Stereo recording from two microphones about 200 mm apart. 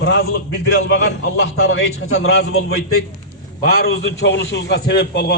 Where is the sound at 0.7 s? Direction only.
60° left (ahead or behind); by 3.0 s 90° left.